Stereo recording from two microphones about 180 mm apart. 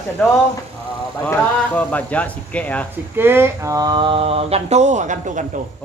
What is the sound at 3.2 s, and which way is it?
Speech, 15° right (ahead or behind).